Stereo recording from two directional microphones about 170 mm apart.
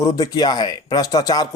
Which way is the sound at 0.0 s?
20° left (ahead or behind).